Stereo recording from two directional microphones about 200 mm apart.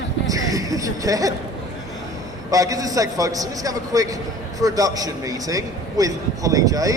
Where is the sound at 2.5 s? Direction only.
15° right (ahead or behind).